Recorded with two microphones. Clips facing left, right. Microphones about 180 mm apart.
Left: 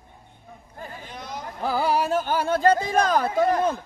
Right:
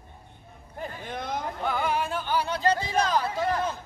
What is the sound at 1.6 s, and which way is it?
Music, 35° left (ahead or behind).